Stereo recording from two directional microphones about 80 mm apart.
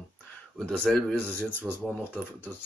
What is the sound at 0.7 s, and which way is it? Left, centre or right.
Speech, centre.